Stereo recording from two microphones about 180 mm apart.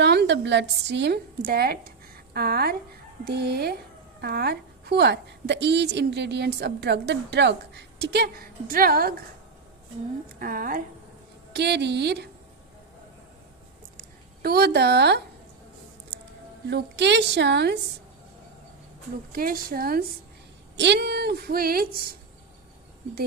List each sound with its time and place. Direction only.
0.0 s a woman's voice: 70° right (ahead or behind)
2.3 s female singing: 60° right (ahead or behind)
4.2 s a woman's voice: 60° right (ahead or behind)
10.4 s a woman's voice: 50° right (ahead or behind)
11.5 s a woman's voice: 70° right (ahead or behind)
14.4 s female singing: 60° right (ahead or behind)
16.6 s a woman's voice: 70° right (ahead or behind)
19.3 s female singing: 55° right (ahead or behind)
20.7 s female singing: 70° right (ahead or behind)